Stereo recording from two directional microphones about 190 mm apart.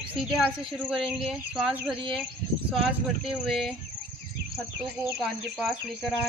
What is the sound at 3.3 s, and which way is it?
Speech, 30° right (ahead or behind).